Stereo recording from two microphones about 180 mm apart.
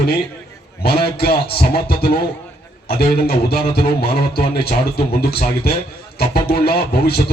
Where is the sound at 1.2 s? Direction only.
60° left (ahead or behind).